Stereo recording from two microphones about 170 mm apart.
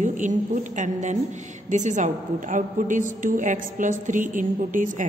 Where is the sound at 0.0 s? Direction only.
45° right (ahead or behind).